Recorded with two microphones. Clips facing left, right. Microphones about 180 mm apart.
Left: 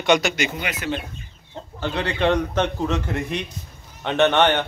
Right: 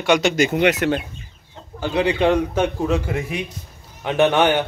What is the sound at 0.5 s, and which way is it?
Speech, 70° right (ahead or behind).